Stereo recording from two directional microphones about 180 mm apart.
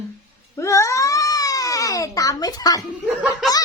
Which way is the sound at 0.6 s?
15° left (ahead or behind).